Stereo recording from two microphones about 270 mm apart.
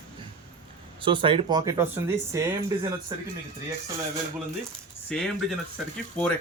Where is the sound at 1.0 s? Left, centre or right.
Centre.